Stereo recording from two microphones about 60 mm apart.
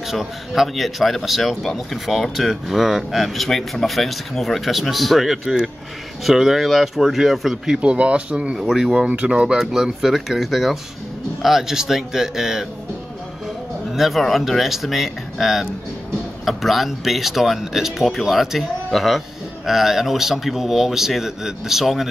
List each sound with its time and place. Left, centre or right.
0.1 s speech: centre
8.5 s speech: centre
9.0 s speech: centre
9.6 s speech: centre
13.9 s speech: centre